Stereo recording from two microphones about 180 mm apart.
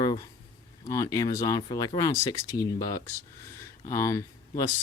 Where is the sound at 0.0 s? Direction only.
20° left (ahead or behind).